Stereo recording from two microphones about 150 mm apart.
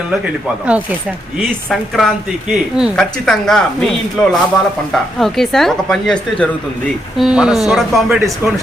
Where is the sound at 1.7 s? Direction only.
Centre (ahead or behind).